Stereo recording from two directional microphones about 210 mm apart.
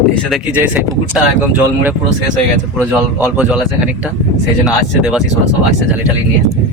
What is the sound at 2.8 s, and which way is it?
Speech, 5° right (ahead or behind).